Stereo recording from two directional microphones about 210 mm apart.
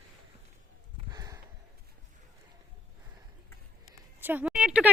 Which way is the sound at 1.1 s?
15° right (ahead or behind).